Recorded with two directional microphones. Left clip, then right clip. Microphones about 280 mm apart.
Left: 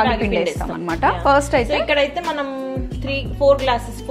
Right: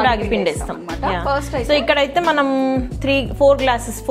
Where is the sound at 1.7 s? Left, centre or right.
Right.